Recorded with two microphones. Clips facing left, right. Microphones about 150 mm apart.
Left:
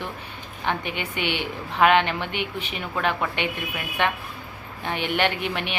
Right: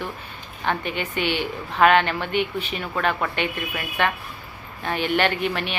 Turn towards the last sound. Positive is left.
turn(degrees=15)  # may be behind; listen again after turning